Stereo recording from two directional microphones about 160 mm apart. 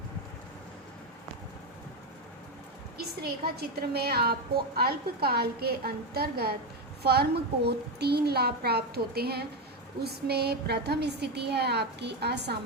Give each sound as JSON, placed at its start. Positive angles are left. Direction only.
{"t": 3.2, "sound": "a woman's voice", "side_deg": -80}
{"t": 7.0, "sound": "a child's voice", "side_deg": -90}